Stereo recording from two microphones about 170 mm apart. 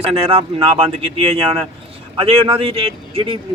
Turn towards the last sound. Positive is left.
turn(degrees=-35)  # may be behind; listen again after turning